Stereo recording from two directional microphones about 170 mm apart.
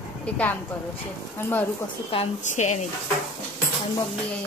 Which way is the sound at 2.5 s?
45° left (ahead or behind).